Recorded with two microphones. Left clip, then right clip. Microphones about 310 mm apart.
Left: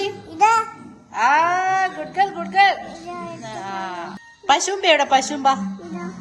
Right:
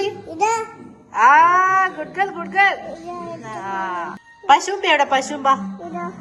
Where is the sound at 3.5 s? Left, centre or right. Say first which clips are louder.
Right 4 dB; centre.